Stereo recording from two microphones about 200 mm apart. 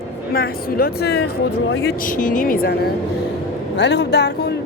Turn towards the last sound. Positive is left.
turn(degrees=55)  # may be behind; listen again after turning